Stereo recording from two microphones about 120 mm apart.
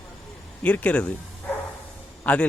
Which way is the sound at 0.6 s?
10° left (ahead or behind).